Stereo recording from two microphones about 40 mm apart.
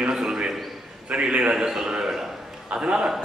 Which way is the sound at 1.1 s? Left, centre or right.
Right.